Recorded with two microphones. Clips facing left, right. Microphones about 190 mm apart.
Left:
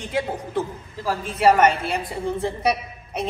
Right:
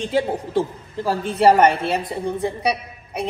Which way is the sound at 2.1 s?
15° right (ahead or behind).